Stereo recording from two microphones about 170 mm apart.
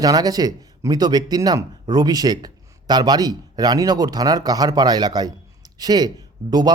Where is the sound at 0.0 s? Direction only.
20° right (ahead or behind).